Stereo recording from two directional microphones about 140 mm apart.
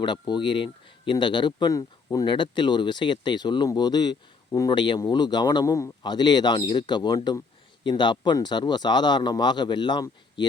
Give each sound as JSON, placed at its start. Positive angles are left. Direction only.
{"t": 0.0, "sound": "speech", "side_deg": 35}